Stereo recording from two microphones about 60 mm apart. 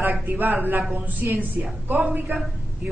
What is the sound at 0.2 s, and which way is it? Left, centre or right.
A woman's voice, right.